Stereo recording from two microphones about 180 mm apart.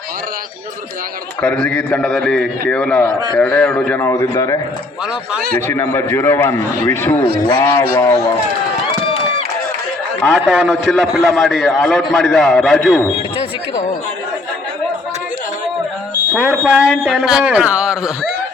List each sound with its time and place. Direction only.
1.4 s a man's voice: 5° left (ahead or behind)
10.2 s a man's voice: 5° right (ahead or behind)
16.3 s a man's voice: 5° right (ahead or behind)